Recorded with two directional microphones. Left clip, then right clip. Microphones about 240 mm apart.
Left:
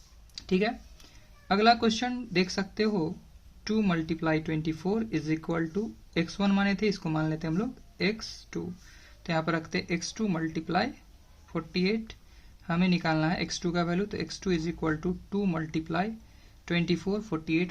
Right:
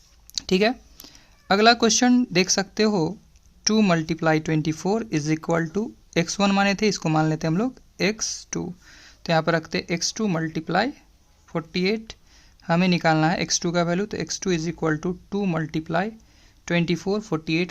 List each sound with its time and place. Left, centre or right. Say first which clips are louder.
0.3 s speech: right 8 dB; right